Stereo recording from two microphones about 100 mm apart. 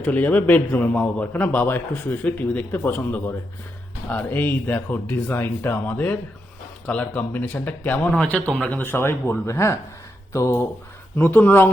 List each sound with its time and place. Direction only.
0.0 s a man's voice: 15° left (ahead or behind)
11.2 s speech: 20° left (ahead or behind)